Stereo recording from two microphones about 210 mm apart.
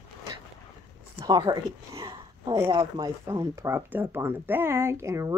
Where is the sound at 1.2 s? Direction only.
20° right (ahead or behind).